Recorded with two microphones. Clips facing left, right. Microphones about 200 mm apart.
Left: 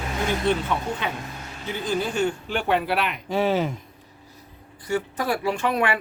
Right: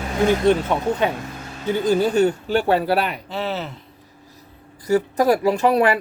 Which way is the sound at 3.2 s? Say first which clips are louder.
Left 4 dB; 10° left (ahead or behind).